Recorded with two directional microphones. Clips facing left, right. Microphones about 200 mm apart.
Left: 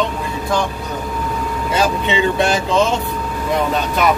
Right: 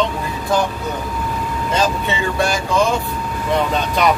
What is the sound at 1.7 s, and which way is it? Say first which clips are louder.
Speech: left 2 dB; 15° left (ahead or behind).